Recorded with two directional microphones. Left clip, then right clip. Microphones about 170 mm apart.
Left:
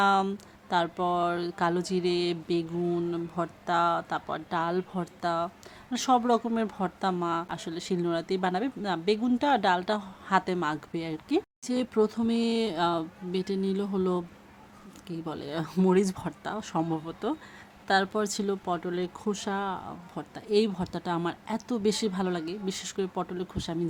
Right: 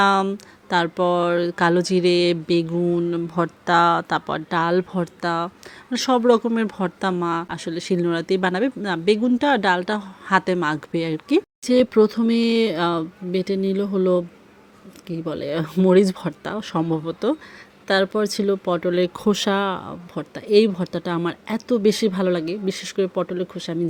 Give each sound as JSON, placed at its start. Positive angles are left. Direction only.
{"t": 0.0, "sound": "a woman's voice", "side_deg": -20}